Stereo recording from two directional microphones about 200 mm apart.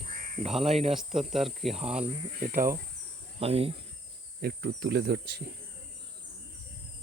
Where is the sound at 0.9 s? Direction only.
Centre (ahead or behind).